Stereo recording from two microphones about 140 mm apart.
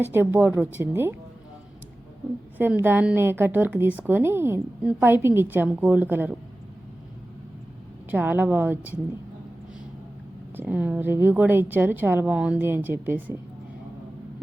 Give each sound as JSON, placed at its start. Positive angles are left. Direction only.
{"t": 0.0, "sound": "a woman's voice", "side_deg": -15}
{"t": 2.6, "sound": "a woman's voice", "side_deg": -15}
{"t": 8.1, "sound": "a woman's voice", "side_deg": -15}
{"t": 10.6, "sound": "a woman's voice", "side_deg": -10}